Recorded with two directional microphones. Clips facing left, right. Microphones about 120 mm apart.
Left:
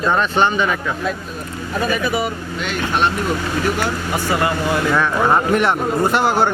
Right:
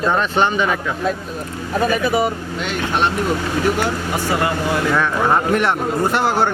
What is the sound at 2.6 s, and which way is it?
Speech, 25° right (ahead or behind).